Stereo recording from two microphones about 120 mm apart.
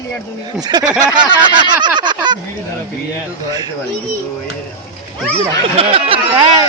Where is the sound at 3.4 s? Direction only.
35° right (ahead or behind).